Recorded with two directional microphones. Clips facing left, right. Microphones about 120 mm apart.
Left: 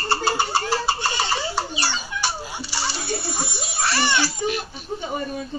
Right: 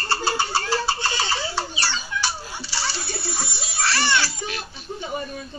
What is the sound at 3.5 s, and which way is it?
Music, 50° left (ahead or behind).